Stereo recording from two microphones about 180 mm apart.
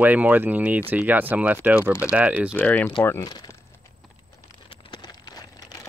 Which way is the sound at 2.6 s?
10° left (ahead or behind).